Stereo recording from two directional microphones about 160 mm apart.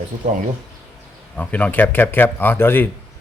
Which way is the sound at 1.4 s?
10° left (ahead or behind).